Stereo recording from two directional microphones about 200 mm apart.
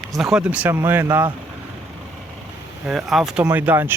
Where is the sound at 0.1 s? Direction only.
Centre (ahead or behind).